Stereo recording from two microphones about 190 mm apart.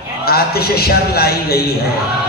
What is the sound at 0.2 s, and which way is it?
A man's voice, 55° left (ahead or behind).